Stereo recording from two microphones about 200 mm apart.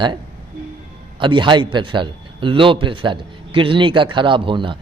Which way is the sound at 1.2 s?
25° right (ahead or behind).